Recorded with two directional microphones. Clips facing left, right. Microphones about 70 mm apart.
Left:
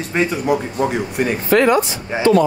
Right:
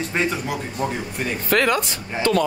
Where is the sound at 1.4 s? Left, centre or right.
Left.